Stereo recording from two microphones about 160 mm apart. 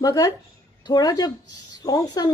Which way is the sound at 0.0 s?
20° left (ahead or behind).